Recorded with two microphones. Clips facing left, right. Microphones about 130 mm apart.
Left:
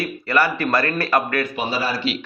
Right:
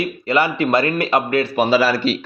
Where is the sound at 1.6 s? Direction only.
85° right.